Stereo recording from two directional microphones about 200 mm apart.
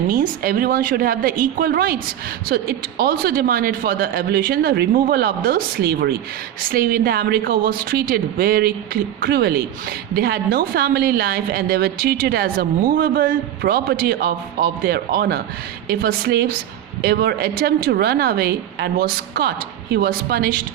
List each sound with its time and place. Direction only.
0.1 s a woman's voice: 45° right (ahead or behind)